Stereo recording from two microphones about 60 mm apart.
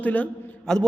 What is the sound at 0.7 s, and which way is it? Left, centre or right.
Speech, centre.